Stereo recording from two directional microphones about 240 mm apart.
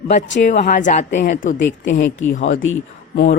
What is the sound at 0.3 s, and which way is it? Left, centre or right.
A woman's voice, left.